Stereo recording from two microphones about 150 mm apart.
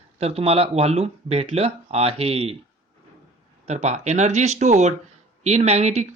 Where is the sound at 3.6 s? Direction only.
50° right (ahead or behind).